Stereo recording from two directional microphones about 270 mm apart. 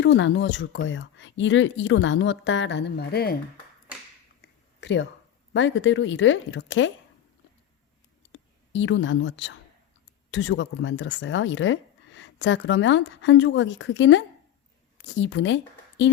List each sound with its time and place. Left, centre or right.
0.0 s speech: left
4.4 s a sound: left
5.5 s speech: left
8.3 s speech: left